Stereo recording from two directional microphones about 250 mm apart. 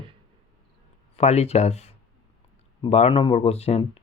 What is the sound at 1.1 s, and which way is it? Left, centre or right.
Speech, left.